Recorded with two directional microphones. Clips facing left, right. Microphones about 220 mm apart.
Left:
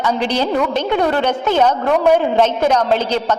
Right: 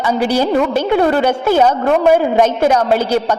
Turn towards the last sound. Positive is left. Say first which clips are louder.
# right 3 dB
turn(degrees=-10)  # may be behind; listen again after turning